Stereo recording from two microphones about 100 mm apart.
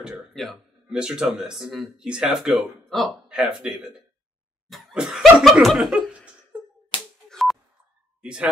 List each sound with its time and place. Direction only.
0.3 s speech: centre (ahead or behind)
4.6 s chuckle: centre (ahead or behind)
6.9 s a sound: 55° left (ahead or behind)
7.2 s sidetone: 5° left (ahead or behind)
8.2 s speech: 10° right (ahead or behind)